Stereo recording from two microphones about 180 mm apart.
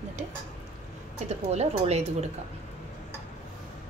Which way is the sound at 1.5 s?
35° right (ahead or behind).